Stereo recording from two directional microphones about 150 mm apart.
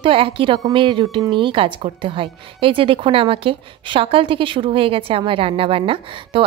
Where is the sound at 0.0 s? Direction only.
35° right (ahead or behind).